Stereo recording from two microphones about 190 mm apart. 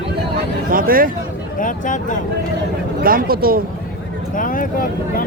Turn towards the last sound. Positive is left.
turn(degrees=45)  # may be behind; listen again after turning